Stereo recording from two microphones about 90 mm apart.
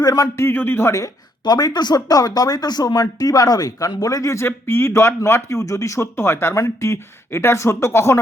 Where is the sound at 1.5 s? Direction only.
50° left (ahead or behind).